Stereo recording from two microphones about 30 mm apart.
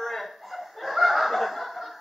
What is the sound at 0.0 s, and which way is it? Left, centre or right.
Chuckle, centre.